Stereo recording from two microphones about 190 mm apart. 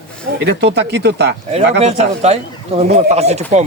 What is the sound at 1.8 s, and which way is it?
Speech, 35° right (ahead or behind).